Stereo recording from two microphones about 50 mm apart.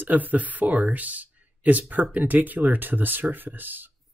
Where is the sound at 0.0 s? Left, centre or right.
Right.